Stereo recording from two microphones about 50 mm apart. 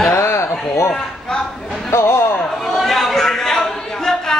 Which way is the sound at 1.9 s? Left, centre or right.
Left.